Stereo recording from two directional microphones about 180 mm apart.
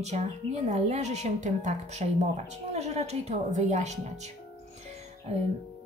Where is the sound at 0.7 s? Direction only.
40° right (ahead or behind).